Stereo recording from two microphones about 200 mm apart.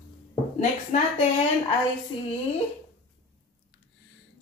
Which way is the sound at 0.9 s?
35° left (ahead or behind).